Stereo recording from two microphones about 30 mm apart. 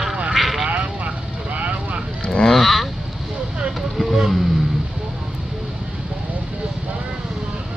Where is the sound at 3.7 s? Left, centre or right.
Centre.